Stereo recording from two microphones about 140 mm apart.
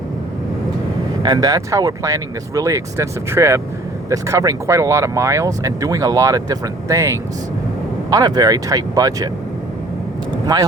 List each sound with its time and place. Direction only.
1.2 s speech: 30° right (ahead or behind)
10.5 s speech: 30° right (ahead or behind)